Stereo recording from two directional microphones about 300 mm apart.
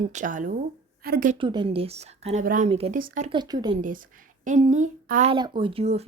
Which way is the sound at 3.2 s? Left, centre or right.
Centre.